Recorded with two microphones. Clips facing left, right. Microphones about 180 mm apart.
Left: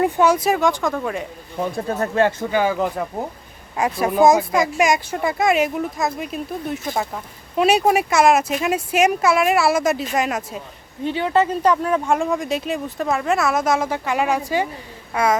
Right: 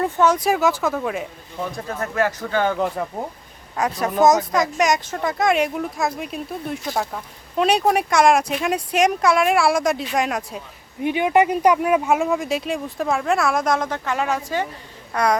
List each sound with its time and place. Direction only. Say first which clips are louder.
0.0 s speech: left 2 dB; 10° left (ahead or behind)
1.5 s speech: left 5 dB; 25° left (ahead or behind)
2.5 s speech: left 1 dB; 10° left (ahead or behind)
11.0 s speech: right 1 dB; 15° right (ahead or behind); by 15.4 s 5° left (ahead or behind)